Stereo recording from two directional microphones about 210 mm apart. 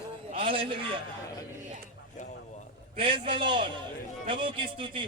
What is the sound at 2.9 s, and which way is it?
A man's voice, 25° right (ahead or behind).